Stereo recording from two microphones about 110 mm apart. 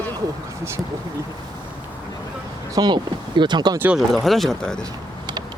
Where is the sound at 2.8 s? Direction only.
40° right (ahead or behind).